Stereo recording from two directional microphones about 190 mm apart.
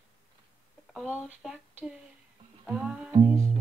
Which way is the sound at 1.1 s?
5° right (ahead or behind).